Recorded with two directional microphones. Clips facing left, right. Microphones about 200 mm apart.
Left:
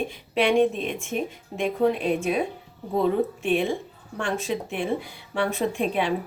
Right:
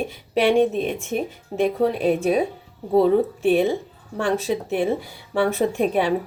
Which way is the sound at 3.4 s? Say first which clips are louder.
Right 5 dB; 40° right (ahead or behind).